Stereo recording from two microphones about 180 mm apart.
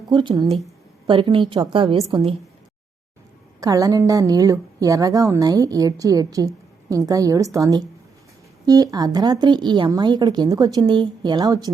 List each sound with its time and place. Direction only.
0.1 s a woman's voice: 25° right (ahead or behind)
3.6 s a woman's voice: 20° right (ahead or behind)